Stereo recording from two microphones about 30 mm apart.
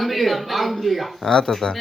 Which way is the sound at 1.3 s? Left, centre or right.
Centre.